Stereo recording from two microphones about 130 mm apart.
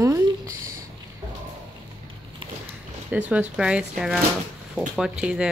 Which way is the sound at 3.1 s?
10° right (ahead or behind).